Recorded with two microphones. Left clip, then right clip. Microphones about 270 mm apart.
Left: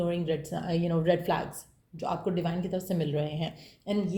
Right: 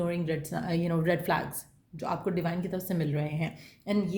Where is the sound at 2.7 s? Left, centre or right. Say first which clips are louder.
Left 2 dB; right.